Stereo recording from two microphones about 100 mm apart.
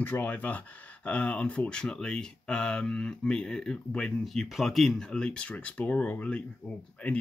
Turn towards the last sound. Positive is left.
turn(degrees=15)  # may be behind; listen again after turning